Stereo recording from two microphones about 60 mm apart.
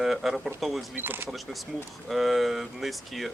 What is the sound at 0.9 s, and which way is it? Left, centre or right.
Speech, right.